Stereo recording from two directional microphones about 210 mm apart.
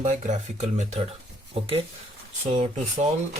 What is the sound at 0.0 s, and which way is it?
Speech, 35° right (ahead or behind).